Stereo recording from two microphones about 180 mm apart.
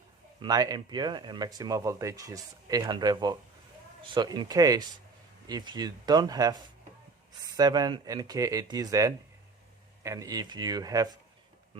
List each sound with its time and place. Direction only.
0.4 s speech: 20° right (ahead or behind)